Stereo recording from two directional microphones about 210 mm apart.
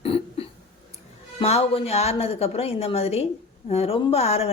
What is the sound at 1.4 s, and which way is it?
A woman's voice, 30° left (ahead or behind).